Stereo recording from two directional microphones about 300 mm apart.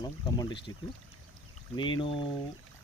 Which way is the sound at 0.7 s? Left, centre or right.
Centre.